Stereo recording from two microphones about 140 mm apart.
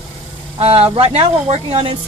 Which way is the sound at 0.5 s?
45° right (ahead or behind).